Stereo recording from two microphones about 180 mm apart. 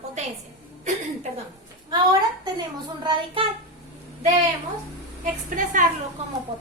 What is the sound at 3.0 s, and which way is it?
Speech, 30° right (ahead or behind).